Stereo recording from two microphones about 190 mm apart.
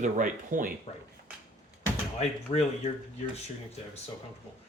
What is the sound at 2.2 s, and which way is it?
Speech, 35° left (ahead or behind).